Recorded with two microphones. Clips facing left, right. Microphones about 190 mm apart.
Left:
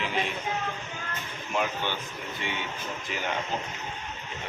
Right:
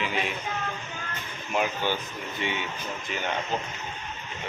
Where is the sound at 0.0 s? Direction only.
5° right (ahead or behind).